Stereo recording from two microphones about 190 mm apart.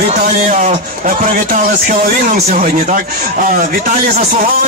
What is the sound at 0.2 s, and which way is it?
Speech, 40° right (ahead or behind).